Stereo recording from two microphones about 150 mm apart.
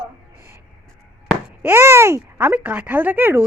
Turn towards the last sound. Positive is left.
turn(degrees=-15)  # may be behind; listen again after turning